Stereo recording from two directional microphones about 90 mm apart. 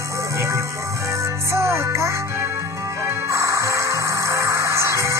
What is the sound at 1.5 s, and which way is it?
Music, 30° right (ahead or behind).